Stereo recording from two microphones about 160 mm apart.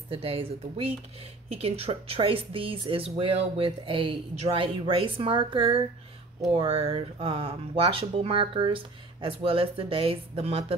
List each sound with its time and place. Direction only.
0.1 s speech: 35° right (ahead or behind)